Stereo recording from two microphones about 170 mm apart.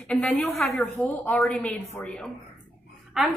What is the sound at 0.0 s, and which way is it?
A woman's voice, centre (ahead or behind).